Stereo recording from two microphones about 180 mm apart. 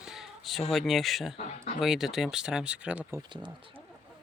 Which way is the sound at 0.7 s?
Centre (ahead or behind).